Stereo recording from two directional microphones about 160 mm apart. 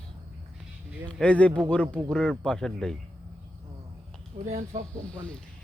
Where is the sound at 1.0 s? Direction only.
5° left (ahead or behind).